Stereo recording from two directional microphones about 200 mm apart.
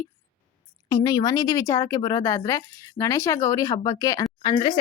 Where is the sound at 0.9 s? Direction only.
20° left (ahead or behind).